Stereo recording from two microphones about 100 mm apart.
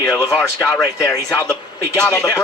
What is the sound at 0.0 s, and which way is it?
Speech, 30° left (ahead or behind).